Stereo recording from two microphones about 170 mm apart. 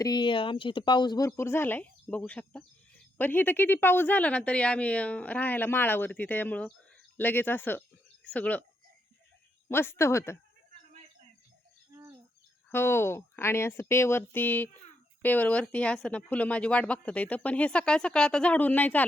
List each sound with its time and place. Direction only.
0.0 s speech: 25° left (ahead or behind); by 8.6 s 10° left (ahead or behind)
9.6 s speech: 15° left (ahead or behind)
11.9 s cricket: 15° right (ahead or behind)
12.7 s speech: 15° left (ahead or behind)